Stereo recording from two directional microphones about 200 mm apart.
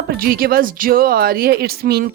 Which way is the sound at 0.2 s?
45° right (ahead or behind).